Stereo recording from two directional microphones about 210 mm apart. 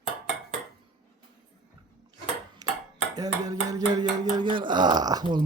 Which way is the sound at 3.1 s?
15° right (ahead or behind).